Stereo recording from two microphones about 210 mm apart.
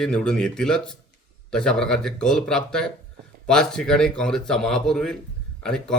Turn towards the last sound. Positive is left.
turn(degrees=5)  # may be behind; listen again after turning